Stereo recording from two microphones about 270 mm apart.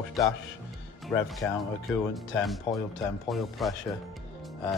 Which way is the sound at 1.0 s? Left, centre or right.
Centre.